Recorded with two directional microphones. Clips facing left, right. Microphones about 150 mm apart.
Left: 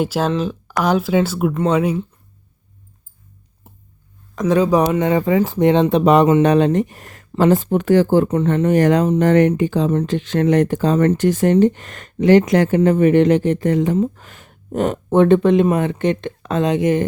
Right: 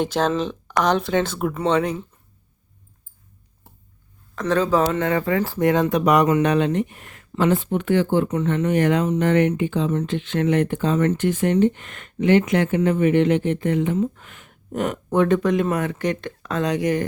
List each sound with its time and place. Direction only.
0.0 s speech: 5° left (ahead or behind)
4.4 s speech: 15° left (ahead or behind)